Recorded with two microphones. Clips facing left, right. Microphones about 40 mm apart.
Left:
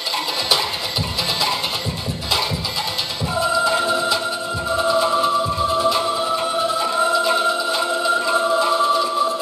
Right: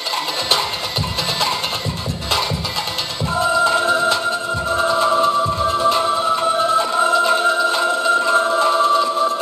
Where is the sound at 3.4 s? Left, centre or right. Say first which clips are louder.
Right 3 dB; right.